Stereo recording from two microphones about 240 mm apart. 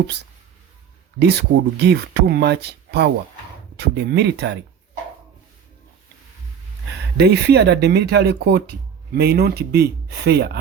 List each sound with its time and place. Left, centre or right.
1.2 s speech: right
7.2 s speech: right